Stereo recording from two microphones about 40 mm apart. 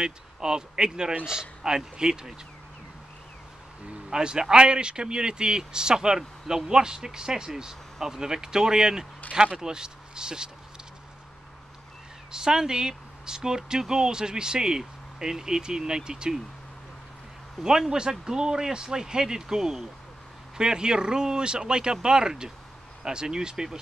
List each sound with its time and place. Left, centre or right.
0.0 s speech: centre
4.1 s speech: centre
12.3 s speech: centre
17.6 s speech: centre